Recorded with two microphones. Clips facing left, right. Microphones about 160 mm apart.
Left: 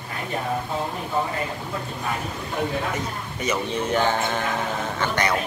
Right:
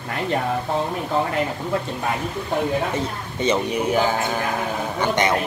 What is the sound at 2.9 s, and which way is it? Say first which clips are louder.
Speech: right 3 dB; 25° right (ahead or behind).